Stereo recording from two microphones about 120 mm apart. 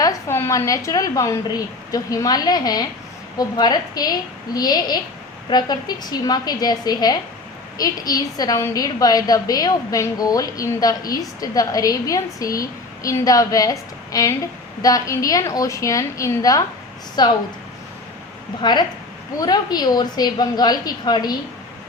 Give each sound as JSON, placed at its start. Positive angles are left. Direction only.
{"t": 0.0, "sound": "a woman's voice", "side_deg": 25}
{"t": 18.6, "sound": "a woman's voice", "side_deg": 40}